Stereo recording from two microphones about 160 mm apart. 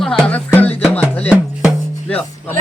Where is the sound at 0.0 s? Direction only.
5° left (ahead or behind).